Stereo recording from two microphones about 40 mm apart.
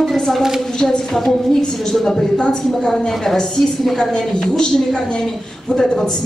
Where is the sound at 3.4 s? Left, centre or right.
Centre.